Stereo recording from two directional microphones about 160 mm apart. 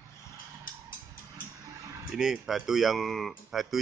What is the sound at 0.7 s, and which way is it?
Music, 60° left (ahead or behind).